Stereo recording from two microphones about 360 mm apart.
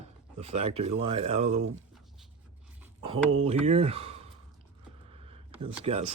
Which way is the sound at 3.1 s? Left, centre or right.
Centre.